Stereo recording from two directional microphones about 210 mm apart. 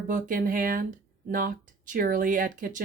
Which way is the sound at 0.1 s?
40° right (ahead or behind).